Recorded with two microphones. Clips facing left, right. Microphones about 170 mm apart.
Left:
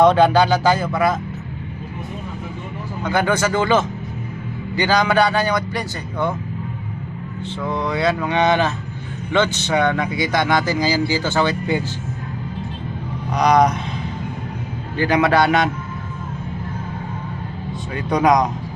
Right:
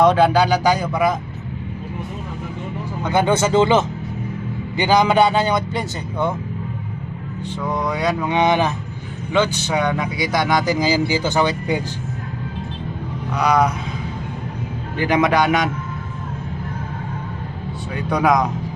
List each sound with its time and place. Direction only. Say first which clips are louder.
0.0 s speech: left 1 dB; 10° right (ahead or behind)
3.0 s speech: right 2 dB; 20° right (ahead or behind)
7.4 s speech: even; 10° right (ahead or behind)
13.4 s speech: left 2 dB; 5° right (ahead or behind)
14.9 s speech: left 1 dB; 15° right (ahead or behind)
17.9 s speech: left 1 dB; 5° right (ahead or behind)